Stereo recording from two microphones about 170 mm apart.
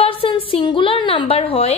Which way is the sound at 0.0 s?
30° left (ahead or behind).